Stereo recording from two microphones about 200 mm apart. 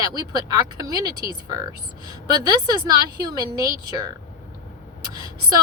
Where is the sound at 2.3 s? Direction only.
20° right (ahead or behind).